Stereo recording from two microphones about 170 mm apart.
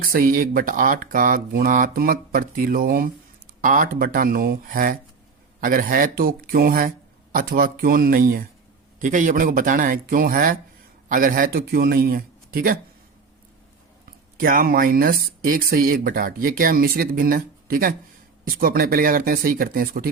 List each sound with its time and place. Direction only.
0.0 s speech: 60° right (ahead or behind)
14.3 s speech: 55° right (ahead or behind)